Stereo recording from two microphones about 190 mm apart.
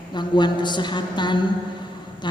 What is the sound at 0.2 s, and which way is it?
A man's voice, 25° left (ahead or behind).